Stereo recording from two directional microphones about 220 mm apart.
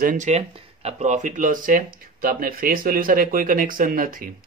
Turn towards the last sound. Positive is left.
turn(degrees=-40)  # may be behind; listen again after turning